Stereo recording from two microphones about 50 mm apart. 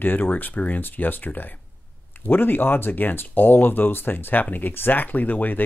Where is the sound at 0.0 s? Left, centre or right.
Left.